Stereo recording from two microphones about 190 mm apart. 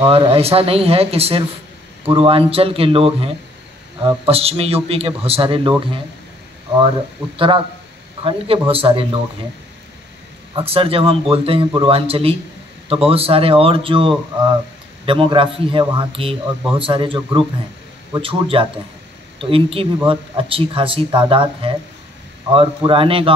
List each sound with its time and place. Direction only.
0.0 s speech: 30° right (ahead or behind)
7.3 s a man's voice: 25° right (ahead or behind)
10.5 s a man's voice: 30° right (ahead or behind)
22.8 s a man's voice: 30° right (ahead or behind)